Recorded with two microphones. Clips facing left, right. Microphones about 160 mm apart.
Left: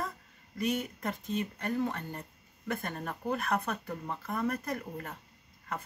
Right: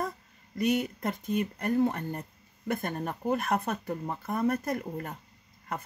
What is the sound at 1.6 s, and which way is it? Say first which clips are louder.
Speech: right 6 dB; 35° right (ahead or behind).